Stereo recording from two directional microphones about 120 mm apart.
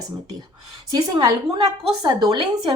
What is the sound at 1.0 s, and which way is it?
A woman's voice, 30° right (ahead or behind).